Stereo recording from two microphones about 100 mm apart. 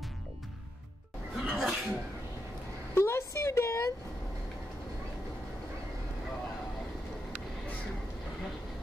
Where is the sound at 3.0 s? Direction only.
25° left (ahead or behind).